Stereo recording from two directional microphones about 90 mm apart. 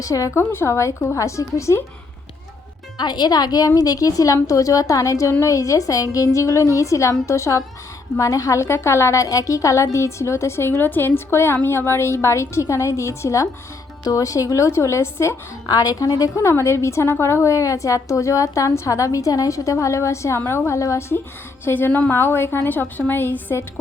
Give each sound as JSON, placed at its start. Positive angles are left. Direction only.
{"t": 0.0, "sound": "a woman's voice", "side_deg": 40}
{"t": 0.3, "sound": "a woman's voice", "side_deg": 30}
{"t": 3.0, "sound": "a woman's voice", "side_deg": 50}
{"t": 15.6, "sound": "a woman's voice", "side_deg": 45}
{"t": 21.6, "sound": "a woman's voice", "side_deg": 25}